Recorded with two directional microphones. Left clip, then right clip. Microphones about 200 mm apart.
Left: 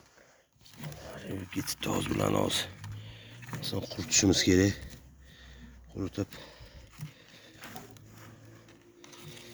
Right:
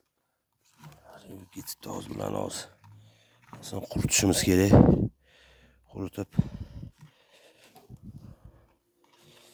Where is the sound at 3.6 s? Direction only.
45° right (ahead or behind).